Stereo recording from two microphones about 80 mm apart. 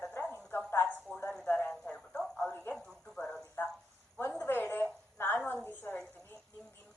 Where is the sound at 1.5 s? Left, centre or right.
Left.